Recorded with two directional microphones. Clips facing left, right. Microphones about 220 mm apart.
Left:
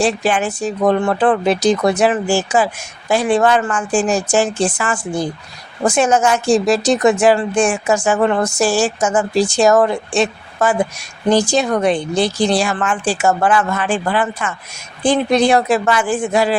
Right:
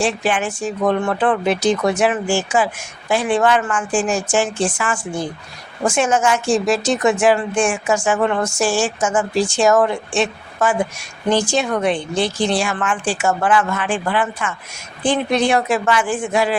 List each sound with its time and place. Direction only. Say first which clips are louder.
0.0 s a woman's voice: left 3 dB; 40° left (ahead or behind)